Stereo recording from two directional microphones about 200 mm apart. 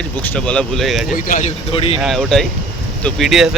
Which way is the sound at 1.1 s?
40° left (ahead or behind).